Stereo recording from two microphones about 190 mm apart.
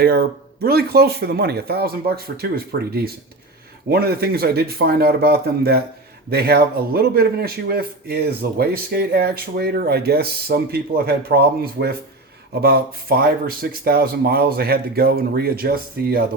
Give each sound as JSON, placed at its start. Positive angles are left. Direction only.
{"t": 0.0, "sound": "a man's voice", "side_deg": -55}
{"t": 3.8, "sound": "a man's voice", "side_deg": -55}